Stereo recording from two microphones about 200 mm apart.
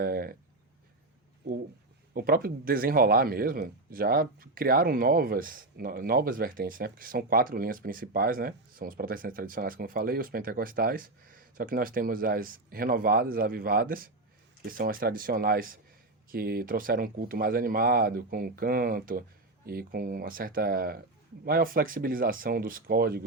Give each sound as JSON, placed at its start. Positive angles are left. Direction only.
{"t": 0.0, "sound": "speech", "side_deg": -45}
{"t": 1.4, "sound": "speech", "side_deg": -55}